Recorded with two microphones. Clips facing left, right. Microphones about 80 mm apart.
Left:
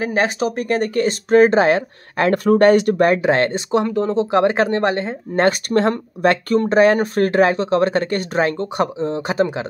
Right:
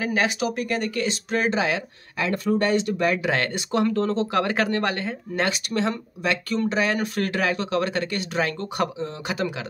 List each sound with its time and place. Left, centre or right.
0.0 s speech: left
3.1 s speech: left
5.3 s speech: left